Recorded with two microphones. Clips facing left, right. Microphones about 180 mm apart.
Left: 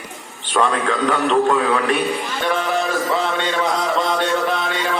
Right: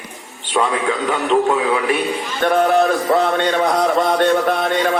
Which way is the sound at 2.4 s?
55° right (ahead or behind).